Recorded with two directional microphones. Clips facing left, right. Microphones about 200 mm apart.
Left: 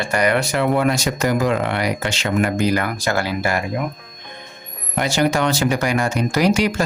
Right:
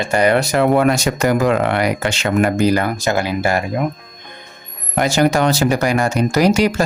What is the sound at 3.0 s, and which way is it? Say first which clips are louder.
Speech: right 3 dB; 20° right (ahead or behind).